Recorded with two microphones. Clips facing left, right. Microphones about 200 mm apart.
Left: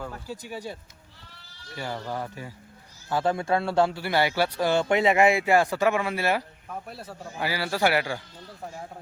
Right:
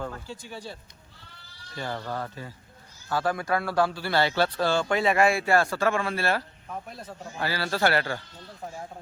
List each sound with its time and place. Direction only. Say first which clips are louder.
0.0 s a man's voice: even; 10° left (ahead or behind)